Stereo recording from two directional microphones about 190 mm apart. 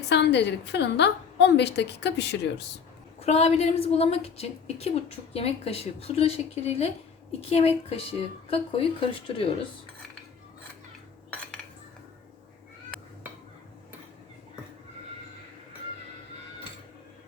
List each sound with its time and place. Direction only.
0.1 s a woman's voice: 65° left (ahead or behind)
3.2 s a woman's voice: 35° left (ahead or behind)